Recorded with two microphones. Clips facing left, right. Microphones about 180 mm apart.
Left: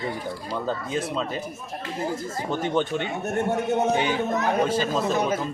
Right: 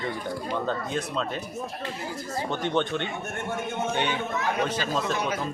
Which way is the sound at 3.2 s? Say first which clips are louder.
Left 8 dB; 40° left (ahead or behind).